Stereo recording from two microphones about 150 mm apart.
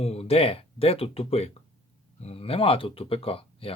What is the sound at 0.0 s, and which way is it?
Speech, 45° left (ahead or behind).